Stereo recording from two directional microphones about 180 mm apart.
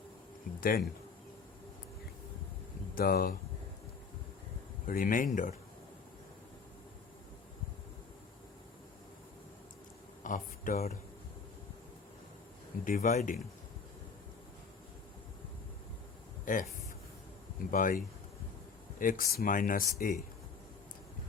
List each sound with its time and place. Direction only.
0.5 s a sound: 50° left (ahead or behind)
2.9 s speech: 55° left (ahead or behind)
4.9 s speech: 50° left (ahead or behind)
10.2 s a sound: 45° left (ahead or behind)
12.8 s speech: 50° left (ahead or behind)
16.5 s speech: 45° left (ahead or behind)
17.7 s speech: 50° left (ahead or behind)